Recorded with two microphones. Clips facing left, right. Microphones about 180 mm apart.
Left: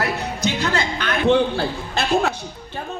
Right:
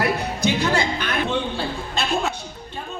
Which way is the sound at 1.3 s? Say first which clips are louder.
Left 7 dB; 65° left (ahead or behind).